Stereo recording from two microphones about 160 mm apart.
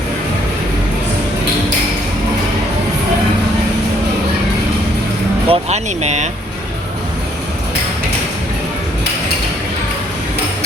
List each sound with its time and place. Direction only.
5.5 s speech: 45° right (ahead or behind)